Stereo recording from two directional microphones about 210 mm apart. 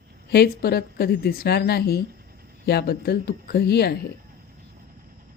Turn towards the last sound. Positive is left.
turn(degrees=50)  # may be behind; listen again after turning